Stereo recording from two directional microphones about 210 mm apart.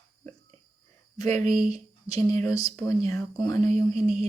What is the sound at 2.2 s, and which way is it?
Speech, 15° left (ahead or behind).